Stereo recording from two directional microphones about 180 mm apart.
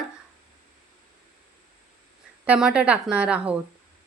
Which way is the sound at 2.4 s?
5° right (ahead or behind).